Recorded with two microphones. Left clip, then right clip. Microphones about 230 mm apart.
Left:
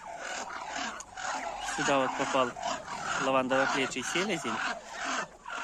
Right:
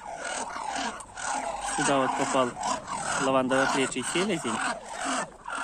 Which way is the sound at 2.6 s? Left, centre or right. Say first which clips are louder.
Right 4 dB; right.